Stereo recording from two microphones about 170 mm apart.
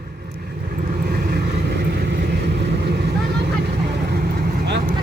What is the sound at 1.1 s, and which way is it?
Vehicle, 65° right (ahead or behind).